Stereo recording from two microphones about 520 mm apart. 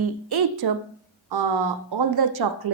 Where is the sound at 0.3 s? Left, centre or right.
Right.